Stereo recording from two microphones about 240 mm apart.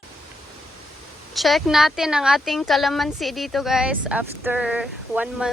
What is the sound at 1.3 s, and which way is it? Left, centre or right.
Speech, centre.